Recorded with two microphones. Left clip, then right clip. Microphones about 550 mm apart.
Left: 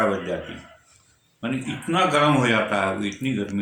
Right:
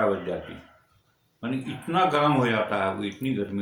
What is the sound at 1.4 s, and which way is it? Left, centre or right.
Speech, right.